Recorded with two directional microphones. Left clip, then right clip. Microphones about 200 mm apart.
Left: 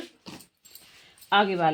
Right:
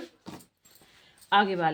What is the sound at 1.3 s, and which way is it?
Speech, 30° left (ahead or behind).